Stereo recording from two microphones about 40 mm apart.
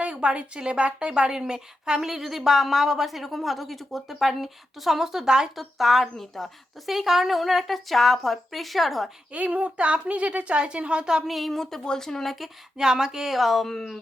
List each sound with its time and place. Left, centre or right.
0.0 s a woman's voice: right
5.5 s speech: centre
6.9 s speech: centre
9.3 s a woman's voice: right
11.3 s speech: centre
12.7 s a woman's voice: centre
13.1 s speech: centre